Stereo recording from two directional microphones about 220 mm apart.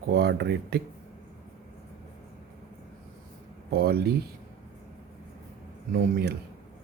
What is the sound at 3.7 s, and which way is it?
Speech, 45° right (ahead or behind).